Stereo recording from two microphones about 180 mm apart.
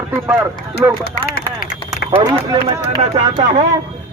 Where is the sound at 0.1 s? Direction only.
10° right (ahead or behind).